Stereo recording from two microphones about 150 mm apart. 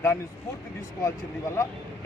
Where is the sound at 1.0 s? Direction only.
20° left (ahead or behind).